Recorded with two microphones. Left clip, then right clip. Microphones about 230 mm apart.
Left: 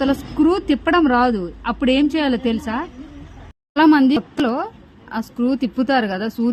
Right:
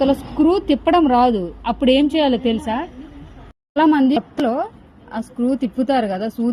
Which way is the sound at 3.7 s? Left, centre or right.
Centre.